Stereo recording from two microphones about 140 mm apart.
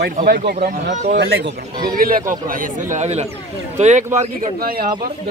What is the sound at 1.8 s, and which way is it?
Speech, 90° right.